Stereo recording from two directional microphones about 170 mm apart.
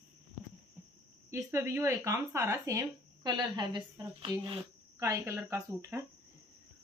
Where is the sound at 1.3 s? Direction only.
15° right (ahead or behind).